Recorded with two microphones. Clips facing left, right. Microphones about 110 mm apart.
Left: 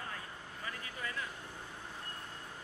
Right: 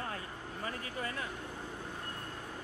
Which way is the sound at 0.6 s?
40° right (ahead or behind).